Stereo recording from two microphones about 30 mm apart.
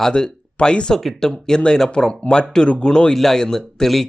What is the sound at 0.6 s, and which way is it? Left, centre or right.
Speech, left.